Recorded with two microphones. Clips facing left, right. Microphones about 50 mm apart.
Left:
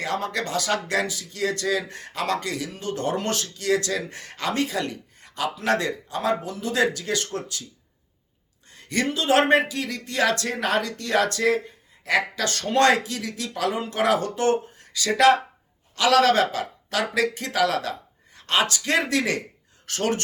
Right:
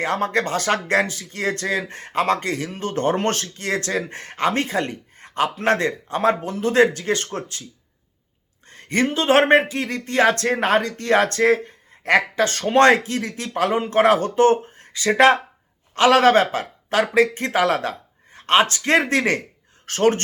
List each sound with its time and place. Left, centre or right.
0.0 s speech: right
8.6 s speech: right
12.4 s speech: right